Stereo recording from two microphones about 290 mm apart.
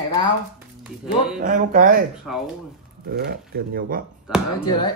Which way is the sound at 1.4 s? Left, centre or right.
Right.